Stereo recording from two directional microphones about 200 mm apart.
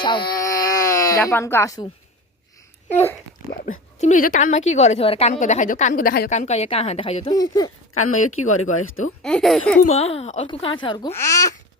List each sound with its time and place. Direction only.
0.0 s a sound: 25° left (ahead or behind)
3.6 s speech: 40° left (ahead or behind); by 7.7 s 20° left (ahead or behind)
7.9 s speech: 90° left
9.2 s speech: centre (ahead or behind)
9.8 s speech: 30° left (ahead or behind); by 11.5 s 15° left (ahead or behind)